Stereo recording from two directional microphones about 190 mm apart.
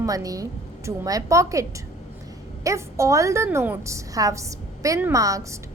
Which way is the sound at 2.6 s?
15° right (ahead or behind).